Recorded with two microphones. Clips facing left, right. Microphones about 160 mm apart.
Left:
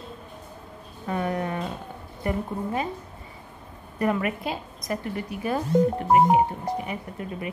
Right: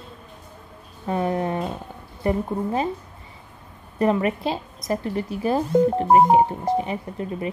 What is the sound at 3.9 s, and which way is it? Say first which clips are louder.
A woman's voice: right 4 dB; 25° right (ahead or behind).